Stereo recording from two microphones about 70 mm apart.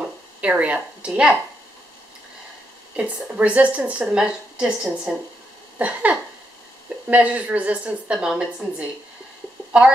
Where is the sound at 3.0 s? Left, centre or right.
Centre.